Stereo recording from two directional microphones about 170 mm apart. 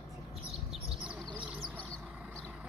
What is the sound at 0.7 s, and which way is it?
Chirp, 5° right (ahead or behind).